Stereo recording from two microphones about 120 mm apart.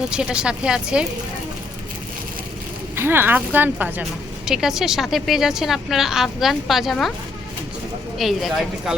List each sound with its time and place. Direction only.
0.1 s speech: 5° right (ahead or behind)
2.9 s speech: 20° right (ahead or behind)
4.4 s a woman's voice: 5° right (ahead or behind)
8.2 s a woman's voice: centre (ahead or behind)